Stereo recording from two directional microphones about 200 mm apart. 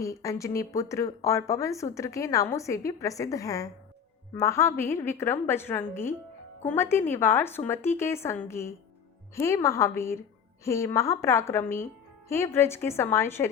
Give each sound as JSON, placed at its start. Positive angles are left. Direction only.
{"t": 0.0, "sound": "speech", "side_deg": 15}